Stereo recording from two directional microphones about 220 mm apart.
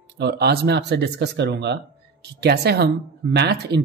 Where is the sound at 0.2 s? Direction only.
50° right (ahead or behind).